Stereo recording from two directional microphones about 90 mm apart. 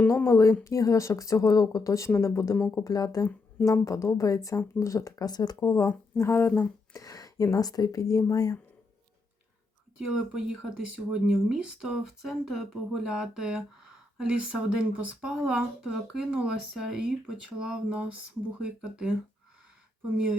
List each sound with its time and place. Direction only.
0.1 s speech: 30° left (ahead or behind)
2.6 s speech: 20° left (ahead or behind)
2.8 s speech: 45° left (ahead or behind)
5.5 s speech: 35° left (ahead or behind)
6.9 s speech: 40° left (ahead or behind)
10.2 s speech: 10° right (ahead or behind)